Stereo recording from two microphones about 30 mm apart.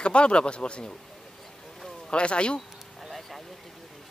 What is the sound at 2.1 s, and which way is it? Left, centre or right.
Speech, left.